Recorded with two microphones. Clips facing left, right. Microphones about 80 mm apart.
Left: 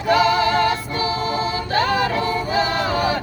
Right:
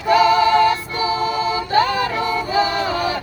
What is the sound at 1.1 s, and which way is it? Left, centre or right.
A capella, left.